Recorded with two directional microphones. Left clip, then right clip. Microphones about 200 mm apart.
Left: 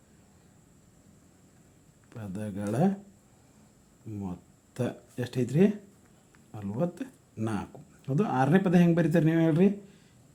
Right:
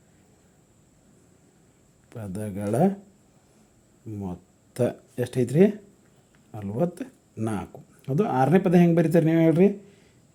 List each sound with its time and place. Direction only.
2.0 s speech: 25° right (ahead or behind)
4.1 s speech: 20° right (ahead or behind)